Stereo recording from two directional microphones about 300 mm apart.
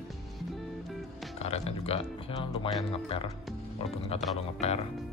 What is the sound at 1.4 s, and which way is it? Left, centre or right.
Speech, left.